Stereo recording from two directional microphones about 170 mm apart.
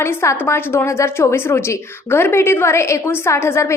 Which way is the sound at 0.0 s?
15° left (ahead or behind).